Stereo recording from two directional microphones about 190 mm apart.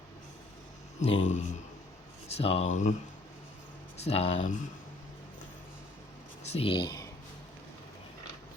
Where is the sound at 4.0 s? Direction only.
35° left (ahead or behind).